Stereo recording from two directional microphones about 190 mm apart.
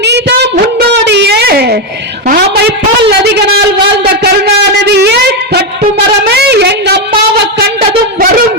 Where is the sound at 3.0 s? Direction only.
60° right (ahead or behind).